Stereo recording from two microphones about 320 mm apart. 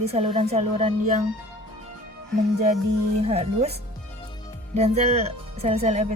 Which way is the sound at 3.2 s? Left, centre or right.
Centre.